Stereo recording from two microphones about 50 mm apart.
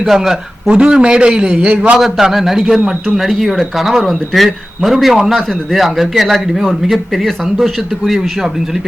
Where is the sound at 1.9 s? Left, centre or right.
Centre.